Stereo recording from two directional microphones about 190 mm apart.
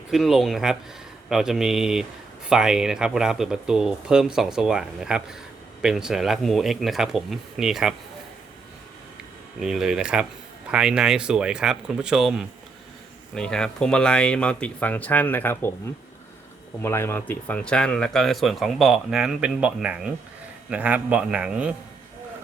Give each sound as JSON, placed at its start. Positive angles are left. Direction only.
{"t": 0.1, "sound": "speech", "side_deg": 0}
{"t": 9.6, "sound": "speech", "side_deg": 0}
{"t": 16.8, "sound": "a man's voice", "side_deg": 15}